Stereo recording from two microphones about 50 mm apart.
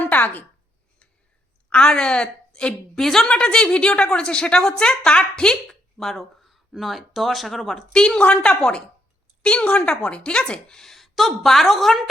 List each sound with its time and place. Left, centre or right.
0.0 s a sound: left
1.7 s a woman's voice: centre
2.9 s a woman's voice: centre
6.0 s speech: centre
7.9 s a woman's voice: centre
8.2 s a woman's voice: left
8.4 s a woman's voice: centre